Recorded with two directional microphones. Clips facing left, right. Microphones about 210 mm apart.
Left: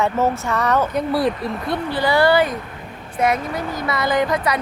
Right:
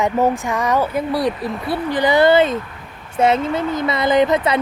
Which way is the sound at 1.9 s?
20° right (ahead or behind).